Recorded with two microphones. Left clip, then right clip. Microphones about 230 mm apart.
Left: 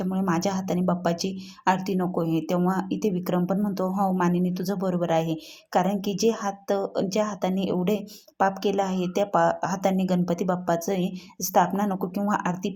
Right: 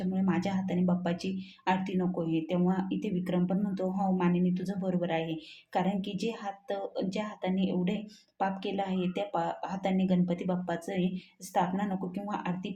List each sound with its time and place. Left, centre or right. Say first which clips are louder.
0.0 s speech: left 7 dB; left